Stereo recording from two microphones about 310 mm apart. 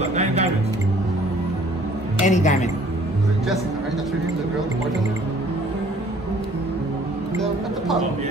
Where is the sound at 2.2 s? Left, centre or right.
Left.